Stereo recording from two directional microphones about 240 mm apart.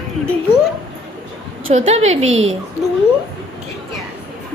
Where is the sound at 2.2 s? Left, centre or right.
Right.